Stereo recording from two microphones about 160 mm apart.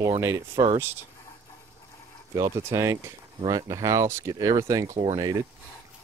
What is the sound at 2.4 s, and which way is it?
Speech, 20° right (ahead or behind).